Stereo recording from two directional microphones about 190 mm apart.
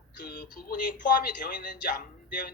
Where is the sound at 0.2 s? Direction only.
45° left (ahead or behind).